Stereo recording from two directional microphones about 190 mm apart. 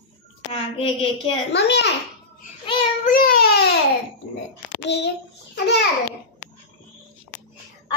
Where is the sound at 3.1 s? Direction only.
50° left (ahead or behind).